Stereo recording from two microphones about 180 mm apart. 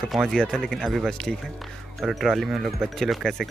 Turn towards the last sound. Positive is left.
turn(degrees=0)  # may be behind; listen again after turning